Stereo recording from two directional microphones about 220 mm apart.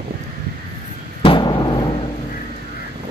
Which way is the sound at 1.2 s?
20° left (ahead or behind).